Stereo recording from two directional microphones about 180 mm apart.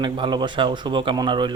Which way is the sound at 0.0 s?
25° right (ahead or behind).